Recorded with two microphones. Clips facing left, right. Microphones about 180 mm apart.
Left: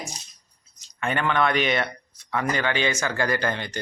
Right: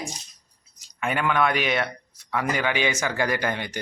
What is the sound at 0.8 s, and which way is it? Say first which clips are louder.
Speech: even; 5° right (ahead or behind).